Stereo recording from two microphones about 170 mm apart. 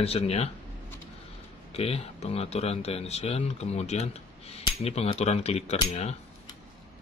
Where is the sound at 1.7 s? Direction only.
35° left (ahead or behind).